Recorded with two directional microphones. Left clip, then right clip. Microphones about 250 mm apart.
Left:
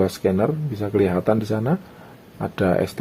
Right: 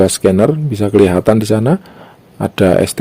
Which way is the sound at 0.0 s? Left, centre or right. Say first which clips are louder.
Right 10 dB; right.